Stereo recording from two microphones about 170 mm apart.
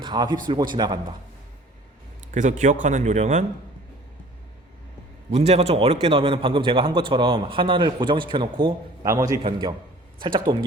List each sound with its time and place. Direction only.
0.0 s a man's voice: 25° right (ahead or behind)
2.3 s speech: 45° right (ahead or behind)
5.3 s a man's voice: 40° right (ahead or behind)
9.1 s a man's voice: 15° right (ahead or behind)
10.2 s a man's voice: 30° right (ahead or behind)